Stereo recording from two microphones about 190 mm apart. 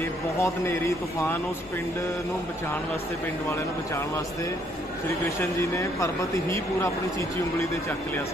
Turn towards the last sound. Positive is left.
turn(degrees=15)  # may be behind; listen again after turning